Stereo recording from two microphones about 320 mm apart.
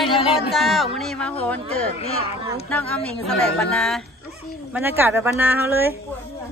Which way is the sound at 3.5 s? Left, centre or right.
Centre.